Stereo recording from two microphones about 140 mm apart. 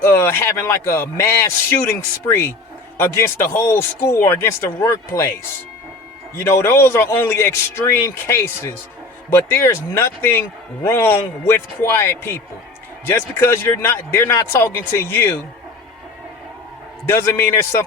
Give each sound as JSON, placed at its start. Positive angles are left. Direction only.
{"t": 0.0, "sound": "a man's voice", "side_deg": 15}
{"t": 6.4, "sound": "speech", "side_deg": 15}
{"t": 17.1, "sound": "a man's voice", "side_deg": 15}